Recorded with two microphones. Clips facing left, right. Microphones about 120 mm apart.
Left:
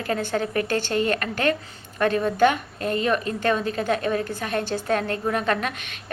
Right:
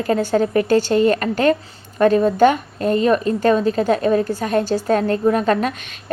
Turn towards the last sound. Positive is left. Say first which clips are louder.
# right 6 dB
turn(degrees=-40)  # may be behind; listen again after turning